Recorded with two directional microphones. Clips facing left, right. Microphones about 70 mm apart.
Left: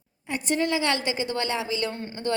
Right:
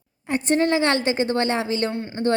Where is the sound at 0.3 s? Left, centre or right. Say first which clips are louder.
Right 6 dB; right.